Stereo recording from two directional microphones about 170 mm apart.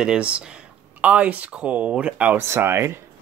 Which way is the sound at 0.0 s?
5° right (ahead or behind).